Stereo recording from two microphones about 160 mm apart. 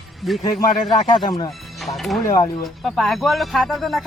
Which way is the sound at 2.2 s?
20° left (ahead or behind).